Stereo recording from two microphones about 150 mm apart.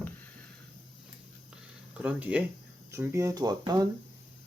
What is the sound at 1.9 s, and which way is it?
Speech, 10° right (ahead or behind).